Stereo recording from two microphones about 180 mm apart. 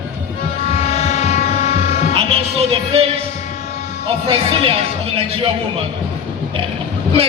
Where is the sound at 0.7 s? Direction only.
35° left (ahead or behind).